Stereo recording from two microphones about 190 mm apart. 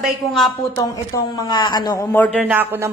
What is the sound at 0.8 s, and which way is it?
A man's voice, 20° left (ahead or behind).